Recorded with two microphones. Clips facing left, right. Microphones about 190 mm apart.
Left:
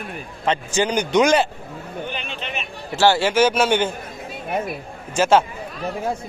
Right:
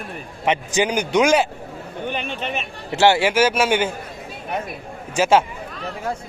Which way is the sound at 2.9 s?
20° right (ahead or behind).